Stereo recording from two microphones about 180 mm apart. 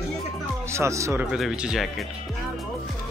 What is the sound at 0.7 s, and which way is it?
Speech, 15° right (ahead or behind).